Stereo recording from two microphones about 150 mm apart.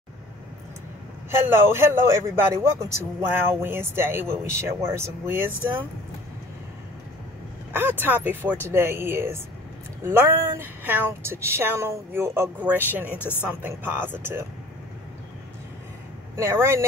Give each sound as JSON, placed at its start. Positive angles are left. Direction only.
{"t": 1.5, "sound": "a man's voice", "side_deg": -15}
{"t": 7.7, "sound": "a man's voice", "side_deg": -15}
{"t": 13.2, "sound": "speech", "side_deg": 15}
{"t": 13.5, "sound": "a man's voice", "side_deg": -10}
{"t": 16.3, "sound": "a man's voice", "side_deg": -15}